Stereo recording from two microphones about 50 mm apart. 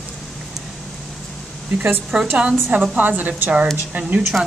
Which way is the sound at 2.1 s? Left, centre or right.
Centre.